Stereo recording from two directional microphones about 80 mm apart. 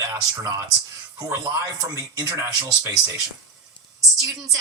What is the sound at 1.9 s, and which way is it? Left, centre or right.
Speech, right.